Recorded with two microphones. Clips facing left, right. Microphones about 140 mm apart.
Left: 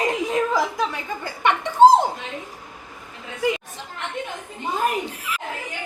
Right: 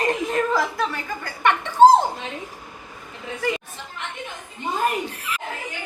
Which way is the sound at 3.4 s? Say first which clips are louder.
Left 3 dB; 15° left (ahead or behind).